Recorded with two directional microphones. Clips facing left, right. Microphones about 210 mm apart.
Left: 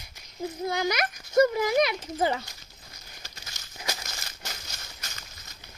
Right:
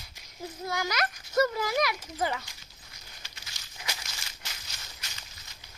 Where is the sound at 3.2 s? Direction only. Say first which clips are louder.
Left 4 dB; 45° left (ahead or behind).